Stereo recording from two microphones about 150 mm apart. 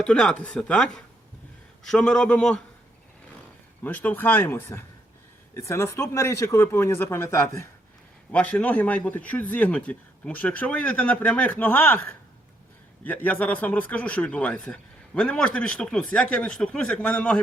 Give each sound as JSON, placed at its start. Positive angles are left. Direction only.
{"t": 0.0, "sound": "speech", "side_deg": 5}
{"t": 3.8, "sound": "speech", "side_deg": 10}